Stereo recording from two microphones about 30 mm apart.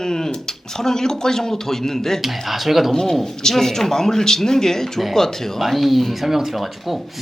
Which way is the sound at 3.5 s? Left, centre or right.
Centre.